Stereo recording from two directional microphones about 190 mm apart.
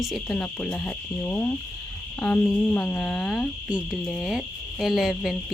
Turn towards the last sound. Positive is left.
turn(degrees=0)  # may be behind; listen again after turning